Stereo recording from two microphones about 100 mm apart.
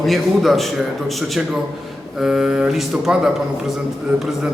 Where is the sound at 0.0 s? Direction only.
Centre (ahead or behind).